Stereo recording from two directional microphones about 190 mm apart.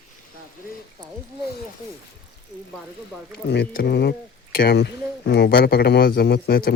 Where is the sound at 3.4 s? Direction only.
55° left (ahead or behind).